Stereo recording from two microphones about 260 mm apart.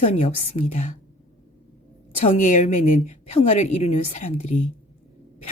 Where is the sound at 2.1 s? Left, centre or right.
Left.